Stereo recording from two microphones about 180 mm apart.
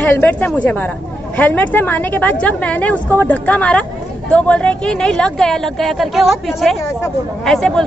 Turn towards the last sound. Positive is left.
turn(degrees=0)  # may be behind; listen again after turning